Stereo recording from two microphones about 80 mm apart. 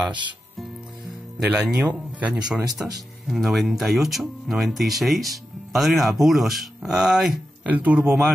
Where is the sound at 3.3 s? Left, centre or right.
Centre.